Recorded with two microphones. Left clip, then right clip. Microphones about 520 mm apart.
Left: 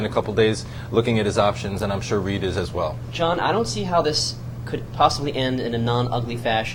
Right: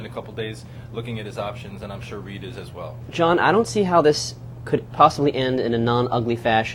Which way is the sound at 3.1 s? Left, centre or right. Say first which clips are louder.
Right 4 dB; right.